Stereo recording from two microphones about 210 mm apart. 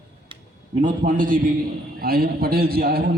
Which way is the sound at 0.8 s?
40° right (ahead or behind).